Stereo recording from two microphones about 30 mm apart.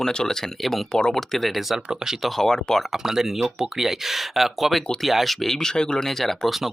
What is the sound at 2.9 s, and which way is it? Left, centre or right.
Speech, centre.